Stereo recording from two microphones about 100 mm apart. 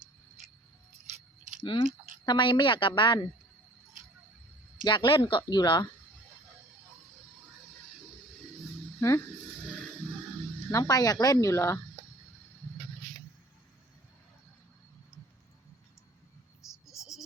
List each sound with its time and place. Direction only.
2.2 s a woman's voice: 50° left (ahead or behind)
4.9 s a woman's voice: 50° left (ahead or behind)
9.0 s speech: 30° left (ahead or behind)
10.7 s speech: 35° left (ahead or behind)
16.9 s a sound: 5° right (ahead or behind)